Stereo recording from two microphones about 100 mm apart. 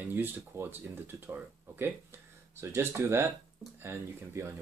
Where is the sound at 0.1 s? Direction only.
20° right (ahead or behind).